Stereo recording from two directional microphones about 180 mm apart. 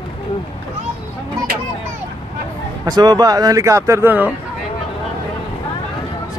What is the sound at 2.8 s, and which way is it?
Speech, 20° right (ahead or behind).